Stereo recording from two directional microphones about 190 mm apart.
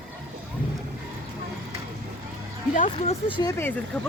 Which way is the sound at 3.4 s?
15° left (ahead or behind).